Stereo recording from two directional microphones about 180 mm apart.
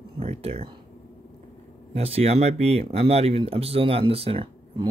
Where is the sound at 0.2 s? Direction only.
35° right (ahead or behind).